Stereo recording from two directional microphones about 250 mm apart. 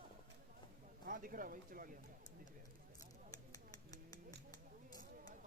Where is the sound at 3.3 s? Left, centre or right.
Centre.